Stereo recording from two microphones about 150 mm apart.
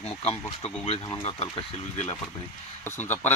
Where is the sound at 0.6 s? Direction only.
40° left (ahead or behind).